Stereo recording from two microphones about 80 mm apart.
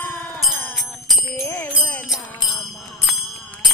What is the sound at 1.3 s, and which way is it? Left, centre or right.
Jingle bell, left.